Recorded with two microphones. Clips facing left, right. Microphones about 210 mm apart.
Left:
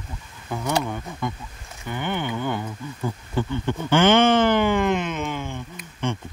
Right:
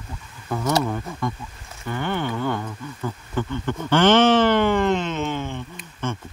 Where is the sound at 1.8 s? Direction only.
15° left (ahead or behind).